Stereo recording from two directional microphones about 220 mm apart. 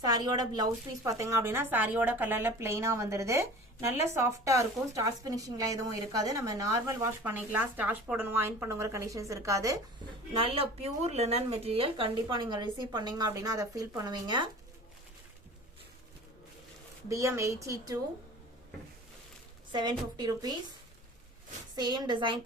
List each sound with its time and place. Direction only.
0.0 s speech: 15° right (ahead or behind)
10.3 s speech: 25° right (ahead or behind)
17.1 s speech: 15° right (ahead or behind)
19.7 s speech: 20° right (ahead or behind)
21.8 s speech: 20° right (ahead or behind)